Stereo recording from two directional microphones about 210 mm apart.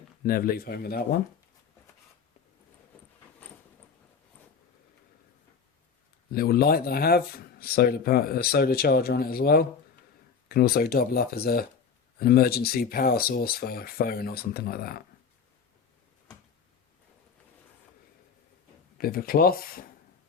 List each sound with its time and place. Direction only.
0.2 s speech: 45° left (ahead or behind)
6.3 s speech: 45° left (ahead or behind)
18.9 s speech: 45° left (ahead or behind)